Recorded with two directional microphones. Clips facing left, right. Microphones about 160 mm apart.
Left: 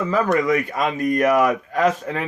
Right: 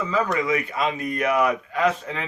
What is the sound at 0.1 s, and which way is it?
A man's voice, 50° left (ahead or behind).